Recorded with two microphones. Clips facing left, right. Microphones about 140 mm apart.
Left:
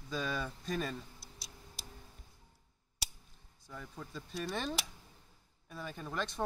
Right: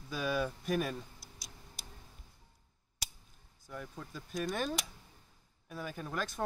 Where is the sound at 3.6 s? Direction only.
Centre (ahead or behind).